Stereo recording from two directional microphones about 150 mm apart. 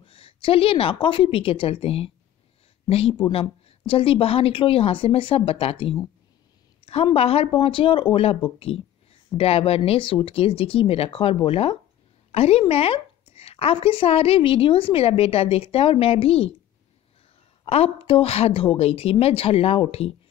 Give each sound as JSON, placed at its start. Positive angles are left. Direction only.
{"t": 0.0, "sound": "a woman's voice", "side_deg": 35}
{"t": 17.6, "sound": "a woman's voice", "side_deg": 40}